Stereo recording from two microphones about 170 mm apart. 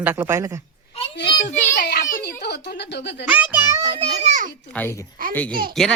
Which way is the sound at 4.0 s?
45° right (ahead or behind).